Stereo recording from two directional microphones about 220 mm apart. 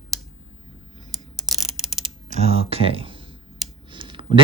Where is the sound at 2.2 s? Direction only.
25° right (ahead or behind).